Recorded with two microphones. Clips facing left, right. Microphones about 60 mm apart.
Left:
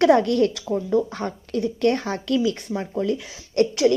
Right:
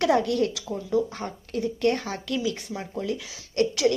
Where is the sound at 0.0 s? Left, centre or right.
Left.